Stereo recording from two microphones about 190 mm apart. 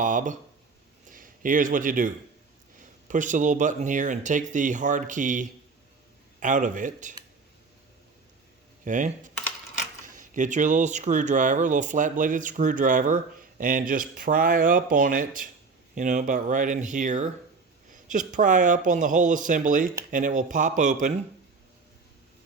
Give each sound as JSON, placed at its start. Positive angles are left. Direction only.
{"t": 0.0, "sound": "speech", "side_deg": -45}
{"t": 8.8, "sound": "speech", "side_deg": -40}